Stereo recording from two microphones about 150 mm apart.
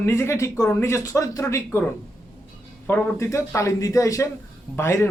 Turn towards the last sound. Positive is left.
turn(degrees=15)  # may be behind; listen again after turning